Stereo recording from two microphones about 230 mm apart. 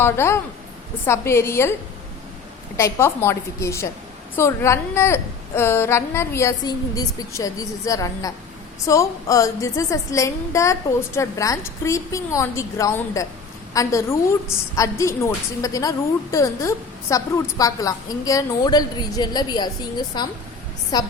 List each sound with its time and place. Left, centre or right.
0.0 s a woman's voice: centre
2.7 s a woman's voice: centre